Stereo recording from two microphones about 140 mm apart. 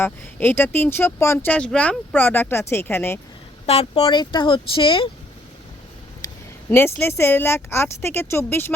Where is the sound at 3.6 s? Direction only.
45° left (ahead or behind).